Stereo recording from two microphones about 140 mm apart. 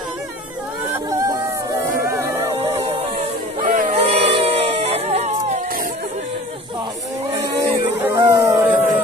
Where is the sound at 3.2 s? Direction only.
65° right (ahead or behind).